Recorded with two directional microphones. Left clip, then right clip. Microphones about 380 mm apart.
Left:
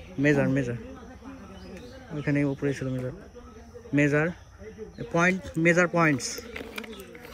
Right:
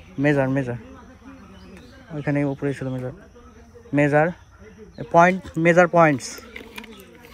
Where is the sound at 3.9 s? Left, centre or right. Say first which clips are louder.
Right 5 dB; right.